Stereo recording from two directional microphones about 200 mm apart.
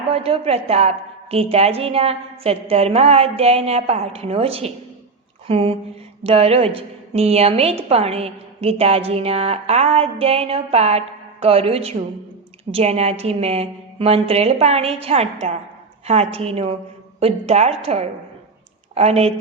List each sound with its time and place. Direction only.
0.1 s a woman's voice: 30° right (ahead or behind)